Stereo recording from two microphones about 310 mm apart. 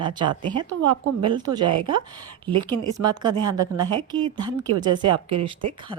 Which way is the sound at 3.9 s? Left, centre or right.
Centre.